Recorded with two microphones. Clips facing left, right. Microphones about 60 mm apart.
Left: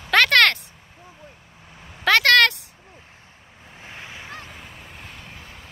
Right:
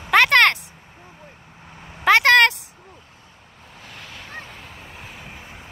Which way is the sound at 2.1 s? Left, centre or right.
Centre.